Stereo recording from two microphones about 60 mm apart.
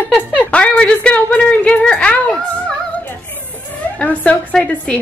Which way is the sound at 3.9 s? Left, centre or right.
Centre.